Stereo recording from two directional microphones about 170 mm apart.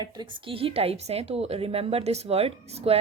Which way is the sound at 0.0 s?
30° right (ahead or behind).